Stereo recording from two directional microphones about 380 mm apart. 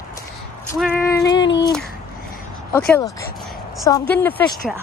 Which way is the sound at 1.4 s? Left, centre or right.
Left.